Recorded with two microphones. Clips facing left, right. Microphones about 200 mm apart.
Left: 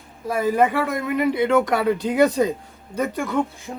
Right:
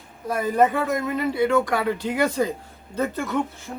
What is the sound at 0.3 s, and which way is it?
Speech, 5° left (ahead or behind).